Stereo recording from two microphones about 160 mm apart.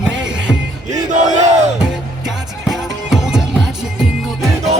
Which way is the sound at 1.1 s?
50° right (ahead or behind).